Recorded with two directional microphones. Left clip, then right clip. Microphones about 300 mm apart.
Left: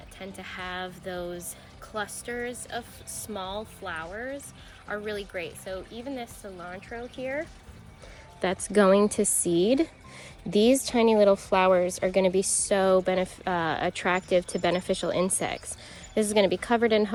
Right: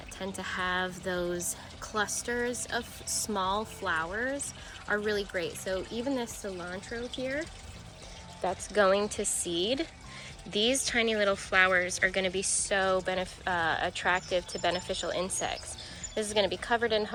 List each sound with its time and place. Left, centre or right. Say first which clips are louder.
0.2 s a woman's voice: right 4 dB; centre
8.4 s speech: left 4 dB; left